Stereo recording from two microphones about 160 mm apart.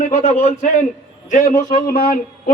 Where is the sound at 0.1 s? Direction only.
50° left (ahead or behind).